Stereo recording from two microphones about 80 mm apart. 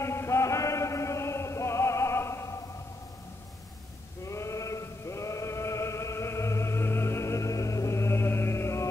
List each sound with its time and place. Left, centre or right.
0.0 s chant: left
4.2 s male singing: left